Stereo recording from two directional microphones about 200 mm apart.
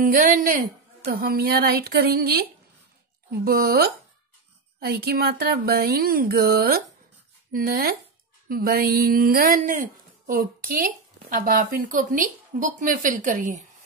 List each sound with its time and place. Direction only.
0.0 s speech: 45° right (ahead or behind)